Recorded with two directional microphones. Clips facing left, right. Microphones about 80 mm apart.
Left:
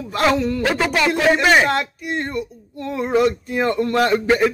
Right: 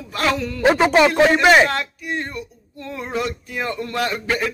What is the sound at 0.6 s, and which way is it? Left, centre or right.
Speech, right.